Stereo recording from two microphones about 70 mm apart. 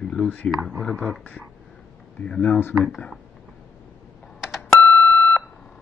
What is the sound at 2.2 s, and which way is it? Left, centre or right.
Speech, centre.